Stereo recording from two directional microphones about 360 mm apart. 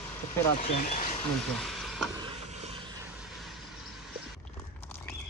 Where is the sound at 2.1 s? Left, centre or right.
Centre.